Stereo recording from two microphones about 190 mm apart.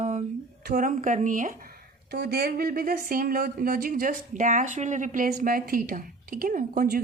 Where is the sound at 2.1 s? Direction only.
55° right (ahead or behind).